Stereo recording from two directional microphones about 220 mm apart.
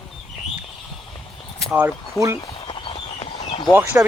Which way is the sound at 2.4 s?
20° left (ahead or behind).